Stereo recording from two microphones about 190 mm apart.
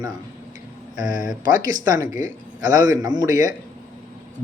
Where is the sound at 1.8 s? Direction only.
20° right (ahead or behind).